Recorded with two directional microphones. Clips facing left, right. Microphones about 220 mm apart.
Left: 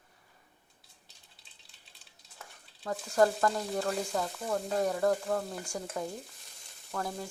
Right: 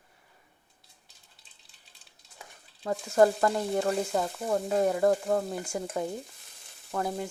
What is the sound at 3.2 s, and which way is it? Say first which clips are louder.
Stir: right 4 dB; 25° right (ahead or behind).